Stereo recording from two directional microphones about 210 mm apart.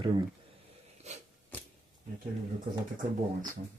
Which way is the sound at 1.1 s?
30° right (ahead or behind).